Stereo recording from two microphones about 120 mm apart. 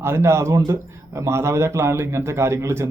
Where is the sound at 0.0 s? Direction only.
20° right (ahead or behind).